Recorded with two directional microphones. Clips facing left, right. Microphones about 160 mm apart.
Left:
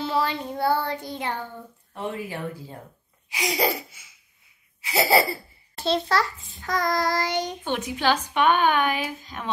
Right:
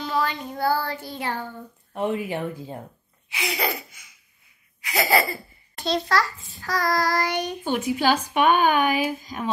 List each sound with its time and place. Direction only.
0.0 s a sound: 30° left (ahead or behind)
2.0 s speech: 20° right (ahead or behind)
3.3 s a sound: 35° left (ahead or behind)
4.8 s a child's voice: 30° left (ahead or behind)
6.5 s child singing: 20° left (ahead or behind)
7.6 s speech: 5° right (ahead or behind)